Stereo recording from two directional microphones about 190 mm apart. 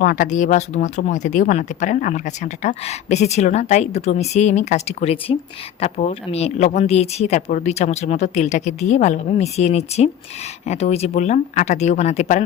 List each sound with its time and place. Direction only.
0.0 s speech: 45° left (ahead or behind)